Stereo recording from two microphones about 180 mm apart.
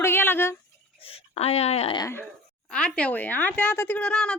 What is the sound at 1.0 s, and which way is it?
Speech, 35° left (ahead or behind).